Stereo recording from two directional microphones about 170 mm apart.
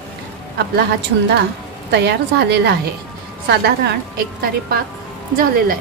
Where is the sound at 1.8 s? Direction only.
80° right.